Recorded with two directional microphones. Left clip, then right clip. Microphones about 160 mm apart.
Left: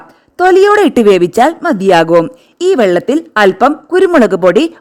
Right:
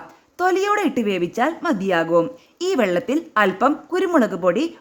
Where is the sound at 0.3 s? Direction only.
40° left (ahead or behind); by 2.2 s 60° left (ahead or behind).